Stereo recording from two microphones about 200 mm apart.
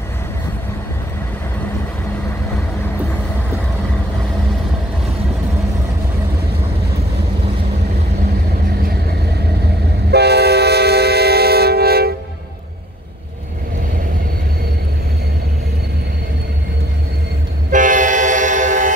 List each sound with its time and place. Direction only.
10.1 s train: 55° right (ahead or behind)
17.6 s train: 40° right (ahead or behind)